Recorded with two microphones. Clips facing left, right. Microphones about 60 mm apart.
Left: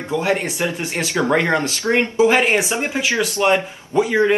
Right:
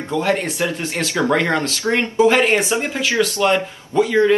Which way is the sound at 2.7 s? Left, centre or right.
Left.